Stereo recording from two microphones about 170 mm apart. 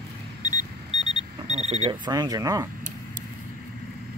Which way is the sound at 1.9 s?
25° right (ahead or behind).